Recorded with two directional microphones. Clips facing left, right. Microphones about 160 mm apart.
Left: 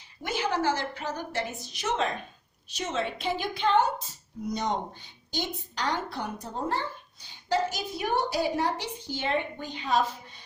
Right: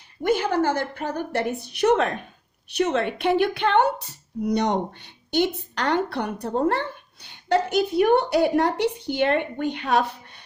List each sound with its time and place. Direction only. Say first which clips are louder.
0.2 s a woman's voice: right 7 dB; 55° right (ahead or behind)